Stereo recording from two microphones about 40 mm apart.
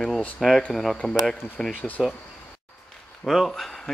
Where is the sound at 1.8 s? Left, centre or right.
Left.